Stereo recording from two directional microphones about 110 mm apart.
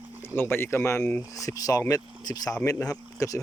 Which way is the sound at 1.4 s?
35° left (ahead or behind).